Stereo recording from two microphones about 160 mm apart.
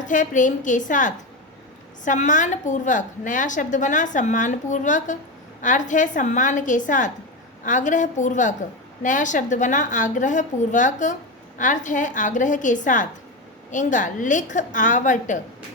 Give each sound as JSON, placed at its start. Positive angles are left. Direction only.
{"t": 0.0, "sound": "a woman's voice", "side_deg": 50}